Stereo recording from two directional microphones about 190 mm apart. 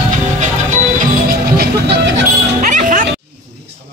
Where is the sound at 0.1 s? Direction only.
40° right (ahead or behind).